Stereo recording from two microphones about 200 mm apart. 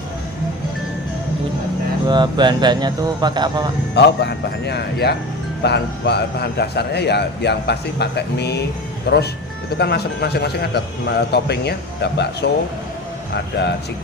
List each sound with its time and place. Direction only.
2.0 s speech: 20° right (ahead or behind)
3.9 s a man's voice: 60° left (ahead or behind)